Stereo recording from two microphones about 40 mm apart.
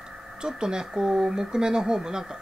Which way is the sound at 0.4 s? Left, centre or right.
Centre.